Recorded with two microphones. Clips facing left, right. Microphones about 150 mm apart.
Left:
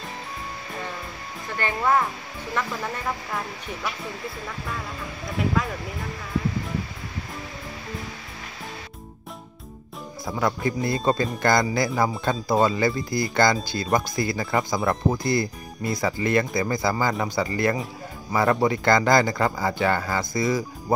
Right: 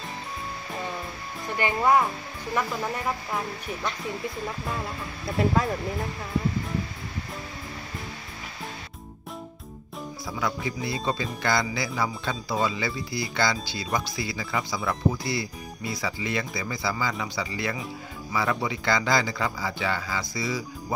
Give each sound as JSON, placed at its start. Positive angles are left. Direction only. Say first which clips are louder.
{"t": 1.6, "sound": "speech", "louder": "right 1 dB", "side_deg": -15}
{"t": 10.2, "sound": "speech", "louder": "left 6 dB", "side_deg": 50}